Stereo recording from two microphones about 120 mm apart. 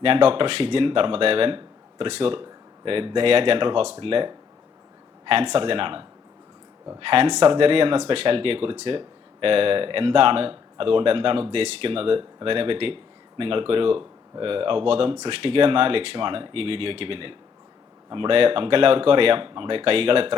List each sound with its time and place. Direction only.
0.0 s speech: 50° right (ahead or behind)